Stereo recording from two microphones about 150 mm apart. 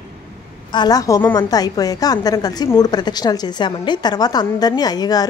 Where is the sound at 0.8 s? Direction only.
25° left (ahead or behind).